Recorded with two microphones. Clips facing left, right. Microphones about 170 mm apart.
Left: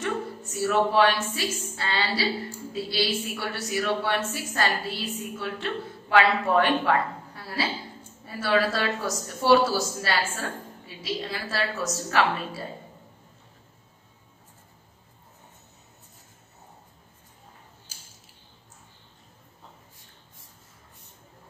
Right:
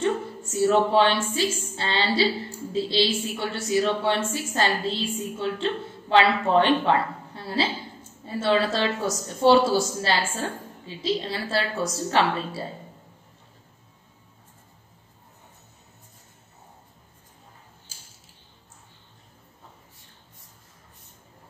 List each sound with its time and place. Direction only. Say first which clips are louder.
0.0 s a woman's voice: right 4 dB; 30° right (ahead or behind)